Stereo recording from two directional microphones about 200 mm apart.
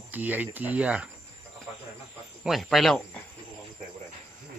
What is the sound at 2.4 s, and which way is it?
Speech, centre (ahead or behind).